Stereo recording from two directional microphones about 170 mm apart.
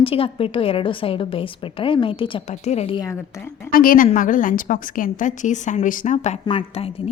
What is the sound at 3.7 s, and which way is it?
A woman's voice, 55° left (ahead or behind).